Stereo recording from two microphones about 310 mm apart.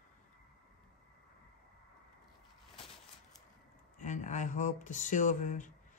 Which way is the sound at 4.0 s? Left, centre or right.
Left.